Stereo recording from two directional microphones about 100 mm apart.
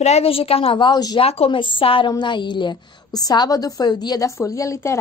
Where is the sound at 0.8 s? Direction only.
45° left (ahead or behind).